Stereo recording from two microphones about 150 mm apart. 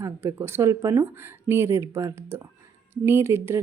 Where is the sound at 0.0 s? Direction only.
15° right (ahead or behind).